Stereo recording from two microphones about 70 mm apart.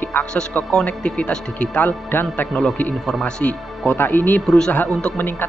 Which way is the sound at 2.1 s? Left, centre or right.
Left.